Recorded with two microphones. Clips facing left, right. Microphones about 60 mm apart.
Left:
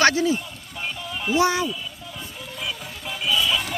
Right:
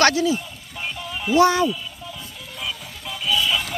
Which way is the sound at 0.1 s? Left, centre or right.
Left.